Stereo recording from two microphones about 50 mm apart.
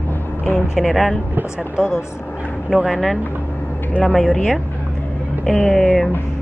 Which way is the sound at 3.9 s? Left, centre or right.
Left.